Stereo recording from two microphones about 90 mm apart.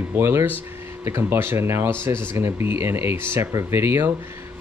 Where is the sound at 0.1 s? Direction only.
30° right (ahead or behind).